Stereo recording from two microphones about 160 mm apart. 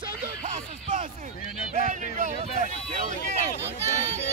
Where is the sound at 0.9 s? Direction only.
60° right (ahead or behind).